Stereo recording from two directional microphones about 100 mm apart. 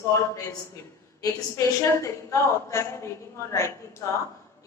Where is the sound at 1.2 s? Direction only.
30° left (ahead or behind).